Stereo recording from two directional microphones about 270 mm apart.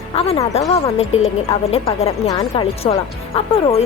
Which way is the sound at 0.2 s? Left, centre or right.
Left.